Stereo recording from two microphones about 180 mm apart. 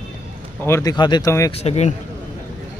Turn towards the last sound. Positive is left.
turn(degrees=35)  # may be behind; listen again after turning